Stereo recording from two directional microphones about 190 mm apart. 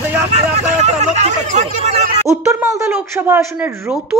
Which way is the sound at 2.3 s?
15° right (ahead or behind).